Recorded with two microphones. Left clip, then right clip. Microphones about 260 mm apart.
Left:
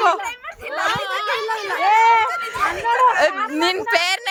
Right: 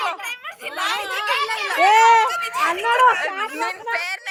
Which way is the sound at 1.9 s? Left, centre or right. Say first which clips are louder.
Even; right.